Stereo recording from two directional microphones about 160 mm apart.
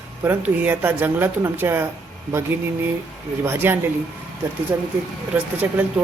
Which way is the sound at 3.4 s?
15° right (ahead or behind).